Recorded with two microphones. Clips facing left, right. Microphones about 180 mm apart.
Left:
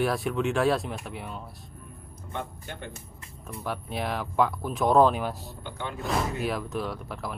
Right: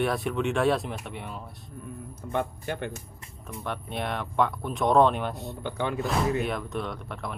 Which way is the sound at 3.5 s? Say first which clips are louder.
Left 1 dB; 5° left (ahead or behind).